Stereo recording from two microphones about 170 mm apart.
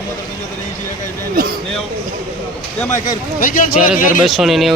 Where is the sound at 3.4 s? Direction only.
55° left (ahead or behind).